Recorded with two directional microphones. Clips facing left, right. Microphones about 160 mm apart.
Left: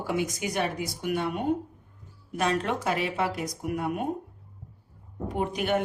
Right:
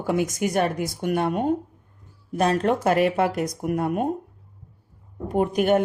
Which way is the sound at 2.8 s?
55° right (ahead or behind).